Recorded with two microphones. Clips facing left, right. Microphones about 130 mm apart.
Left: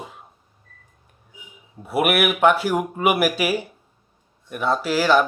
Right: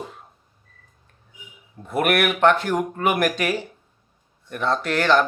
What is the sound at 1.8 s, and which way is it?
Speech, 10° left (ahead or behind).